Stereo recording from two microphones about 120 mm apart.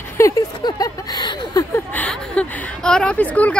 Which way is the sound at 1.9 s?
10° left (ahead or behind).